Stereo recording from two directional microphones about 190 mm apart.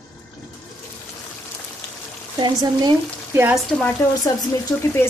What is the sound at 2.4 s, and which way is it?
Speech, 25° right (ahead or behind).